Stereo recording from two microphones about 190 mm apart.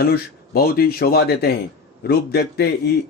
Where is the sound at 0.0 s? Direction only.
55° left (ahead or behind).